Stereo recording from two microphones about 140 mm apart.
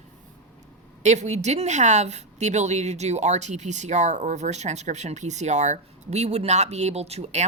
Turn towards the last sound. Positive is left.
turn(degrees=-50)  # may be behind; listen again after turning